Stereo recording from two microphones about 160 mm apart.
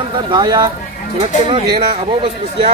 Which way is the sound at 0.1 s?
30° right (ahead or behind).